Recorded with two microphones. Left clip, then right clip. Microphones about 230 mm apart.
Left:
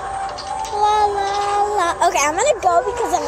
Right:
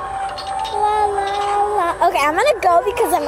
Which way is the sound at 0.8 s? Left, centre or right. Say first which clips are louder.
Left 2 dB; centre.